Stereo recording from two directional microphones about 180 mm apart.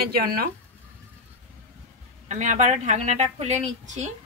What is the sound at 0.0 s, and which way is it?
Speech, 55° right (ahead or behind).